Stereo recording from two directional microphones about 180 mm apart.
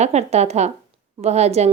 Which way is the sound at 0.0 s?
40° right (ahead or behind).